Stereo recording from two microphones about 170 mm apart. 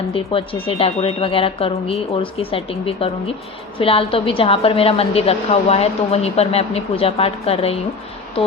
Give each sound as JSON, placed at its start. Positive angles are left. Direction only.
{"t": 0.1, "sound": "a woman's voice", "side_deg": 35}